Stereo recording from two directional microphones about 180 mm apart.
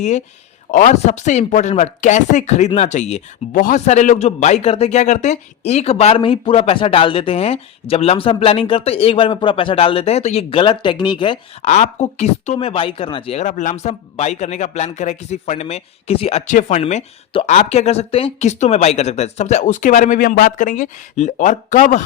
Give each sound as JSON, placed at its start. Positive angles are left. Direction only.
{"t": 0.7, "sound": "a man's voice", "side_deg": 45}
{"t": 11.6, "sound": "a man's voice", "side_deg": 40}